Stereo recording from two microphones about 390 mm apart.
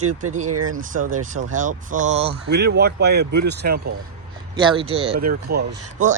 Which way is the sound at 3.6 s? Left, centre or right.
Right.